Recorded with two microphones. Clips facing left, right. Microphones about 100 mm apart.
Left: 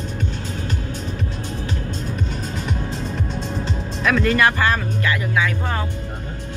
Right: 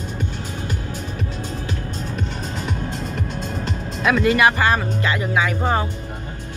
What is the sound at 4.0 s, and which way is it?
Speech, 15° right (ahead or behind).